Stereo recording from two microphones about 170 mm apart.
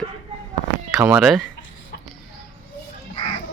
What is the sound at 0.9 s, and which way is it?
Speech, 5° right (ahead or behind).